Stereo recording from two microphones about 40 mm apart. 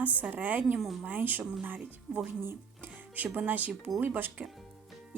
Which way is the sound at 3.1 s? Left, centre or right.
Right.